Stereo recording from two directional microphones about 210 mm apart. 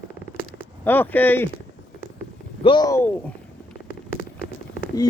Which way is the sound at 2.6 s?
20° left (ahead or behind).